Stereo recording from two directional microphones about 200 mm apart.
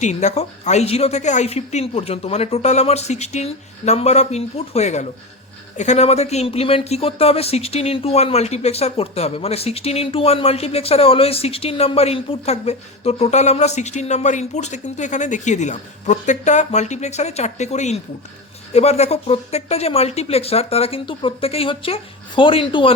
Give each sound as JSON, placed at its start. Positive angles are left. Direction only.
{"t": 0.0, "sound": "speech", "side_deg": 35}